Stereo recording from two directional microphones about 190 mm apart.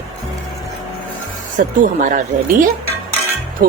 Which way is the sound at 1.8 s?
45° right (ahead or behind).